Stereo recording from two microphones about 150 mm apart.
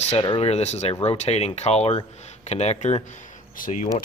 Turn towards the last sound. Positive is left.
turn(degrees=60)  # may be behind; listen again after turning